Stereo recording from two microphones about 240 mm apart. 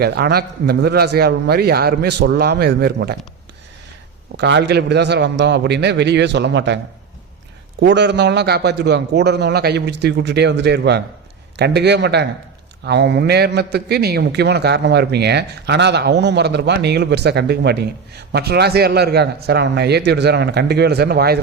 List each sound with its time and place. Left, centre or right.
0.0 s a man's voice: right
4.4 s a man's voice: right
7.8 s a man's voice: right